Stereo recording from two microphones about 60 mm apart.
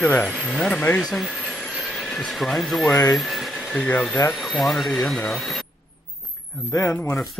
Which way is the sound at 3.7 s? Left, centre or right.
Left.